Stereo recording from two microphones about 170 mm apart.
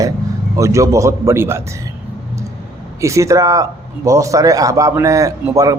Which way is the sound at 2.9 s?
15° right (ahead or behind).